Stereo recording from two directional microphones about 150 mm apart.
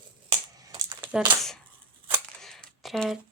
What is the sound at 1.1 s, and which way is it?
Speech, 10° right (ahead or behind).